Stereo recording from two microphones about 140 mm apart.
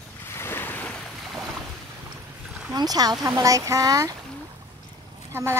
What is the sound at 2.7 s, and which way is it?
Speech, 25° right (ahead or behind).